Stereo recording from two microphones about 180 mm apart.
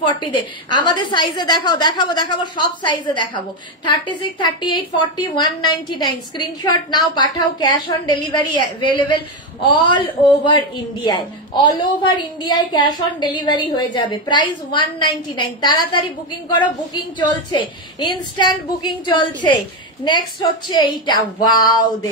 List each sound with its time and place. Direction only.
0.0 s a woman's voice: 25° left (ahead or behind)
10.4 s a woman's voice: 25° left (ahead or behind)